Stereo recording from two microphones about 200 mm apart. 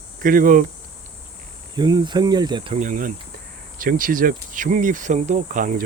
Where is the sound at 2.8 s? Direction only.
40° right (ahead or behind).